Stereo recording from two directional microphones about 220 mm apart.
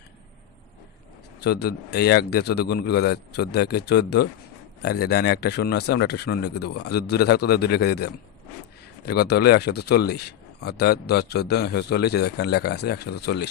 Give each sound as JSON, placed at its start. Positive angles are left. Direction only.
{"t": 1.4, "sound": "speech", "side_deg": 45}